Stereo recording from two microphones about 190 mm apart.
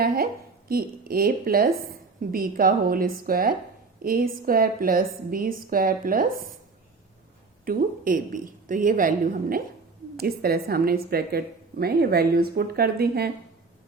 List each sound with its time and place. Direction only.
0.0 s a woman's voice: 50° right (ahead or behind)
7.6 s a woman's voice: 50° right (ahead or behind)